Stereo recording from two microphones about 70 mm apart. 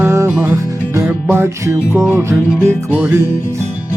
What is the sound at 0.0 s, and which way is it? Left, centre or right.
Music, right.